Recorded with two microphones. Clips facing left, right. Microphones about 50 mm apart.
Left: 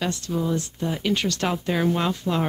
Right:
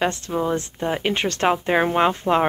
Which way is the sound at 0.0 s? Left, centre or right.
Right.